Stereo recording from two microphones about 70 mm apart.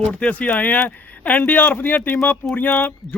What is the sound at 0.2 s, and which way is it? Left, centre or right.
Speech, left.